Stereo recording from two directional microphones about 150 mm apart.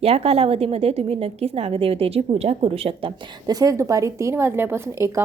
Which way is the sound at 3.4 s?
25° right (ahead or behind).